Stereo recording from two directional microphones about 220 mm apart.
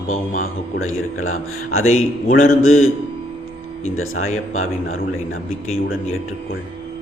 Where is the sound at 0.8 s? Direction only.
70° left (ahead or behind).